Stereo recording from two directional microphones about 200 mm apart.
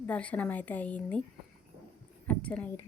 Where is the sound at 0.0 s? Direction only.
5° left (ahead or behind).